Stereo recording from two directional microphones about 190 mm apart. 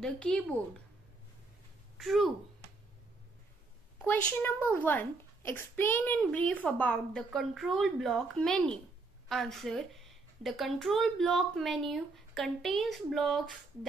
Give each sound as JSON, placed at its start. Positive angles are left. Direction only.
{"t": 0.0, "sound": "a woman's voice", "side_deg": 5}
{"t": 2.0, "sound": "a woman's voice", "side_deg": 0}
{"t": 4.0, "sound": "a woman's voice", "side_deg": 10}